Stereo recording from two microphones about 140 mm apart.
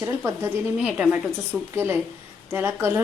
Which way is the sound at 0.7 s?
5° right (ahead or behind).